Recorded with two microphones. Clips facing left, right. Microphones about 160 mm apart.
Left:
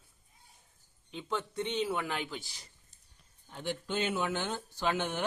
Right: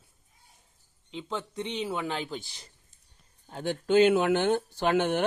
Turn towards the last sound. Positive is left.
turn(degrees=-55)  # may be behind; listen again after turning